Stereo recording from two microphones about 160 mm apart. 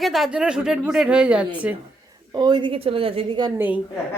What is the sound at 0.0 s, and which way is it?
A woman's voice, centre (ahead or behind).